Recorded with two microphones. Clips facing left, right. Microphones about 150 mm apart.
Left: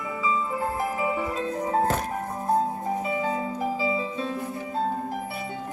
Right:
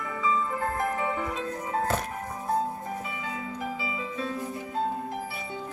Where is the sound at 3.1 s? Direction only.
35° left (ahead or behind).